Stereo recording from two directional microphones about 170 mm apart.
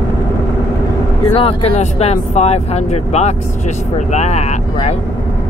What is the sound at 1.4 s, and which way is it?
Speech, 35° left (ahead or behind).